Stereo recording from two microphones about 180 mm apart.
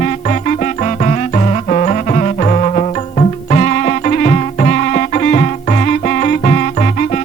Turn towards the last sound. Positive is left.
turn(degrees=45)  # may be behind; listen again after turning